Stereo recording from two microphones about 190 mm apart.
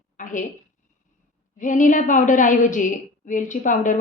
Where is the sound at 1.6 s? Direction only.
45° left (ahead or behind).